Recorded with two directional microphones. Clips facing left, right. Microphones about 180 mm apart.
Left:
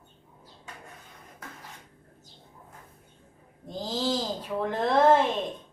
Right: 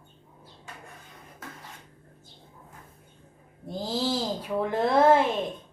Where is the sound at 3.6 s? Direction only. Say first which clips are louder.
Right 1 dB; 10° right (ahead or behind).